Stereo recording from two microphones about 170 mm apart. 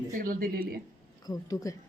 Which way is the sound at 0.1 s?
55° right (ahead or behind).